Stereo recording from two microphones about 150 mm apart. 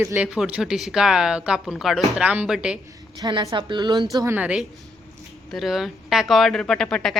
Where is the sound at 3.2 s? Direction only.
25° right (ahead or behind).